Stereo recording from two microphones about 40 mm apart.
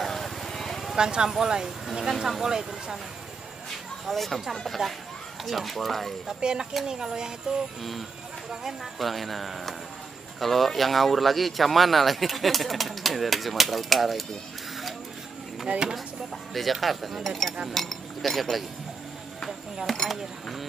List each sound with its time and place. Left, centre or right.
0.0 s clip-clop: centre
0.9 s speech: centre
4.0 s speech: centre
6.4 s speech: centre
8.9 s speech: centre
15.7 s speech: right
16.8 s speech: centre
19.9 s speech: centre